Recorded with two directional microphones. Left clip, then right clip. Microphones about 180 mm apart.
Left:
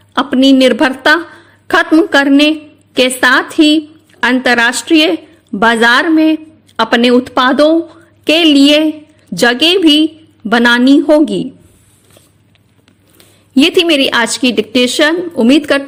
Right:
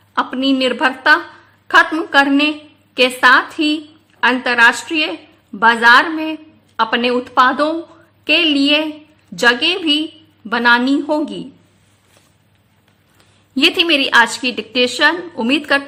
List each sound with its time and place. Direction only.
0.1 s a woman's voice: 40° left (ahead or behind)
1.6 s a sound: 40° left (ahead or behind)
1.9 s a woman's voice: 35° left (ahead or behind)
13.1 s a woman's voice: 35° left (ahead or behind)